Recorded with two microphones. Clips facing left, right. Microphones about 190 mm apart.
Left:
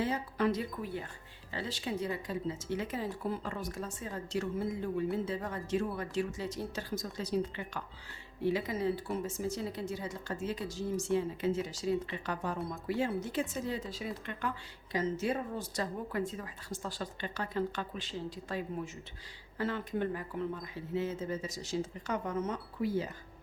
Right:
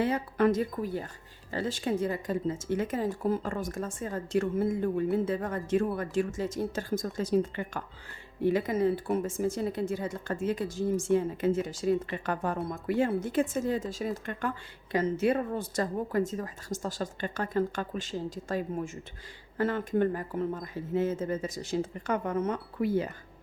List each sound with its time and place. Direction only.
0.0 s speech: 55° right (ahead or behind)
14.9 s speech: 60° right (ahead or behind)